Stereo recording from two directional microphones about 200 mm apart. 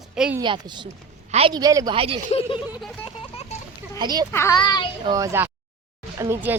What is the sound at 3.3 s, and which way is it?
Children playing, 30° left (ahead or behind).